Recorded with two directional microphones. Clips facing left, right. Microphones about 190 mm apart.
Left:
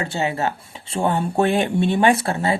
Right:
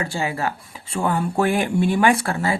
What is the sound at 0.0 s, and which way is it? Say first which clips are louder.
Speech: left 2 dB; 25° left (ahead or behind).